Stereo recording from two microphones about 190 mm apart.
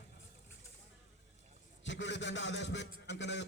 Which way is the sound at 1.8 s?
75° left (ahead or behind).